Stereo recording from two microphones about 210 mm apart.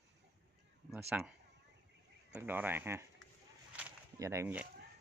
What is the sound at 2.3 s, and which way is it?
Speech, 10° right (ahead or behind).